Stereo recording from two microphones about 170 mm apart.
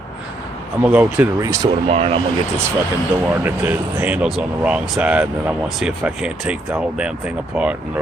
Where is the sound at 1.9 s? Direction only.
35° right (ahead or behind).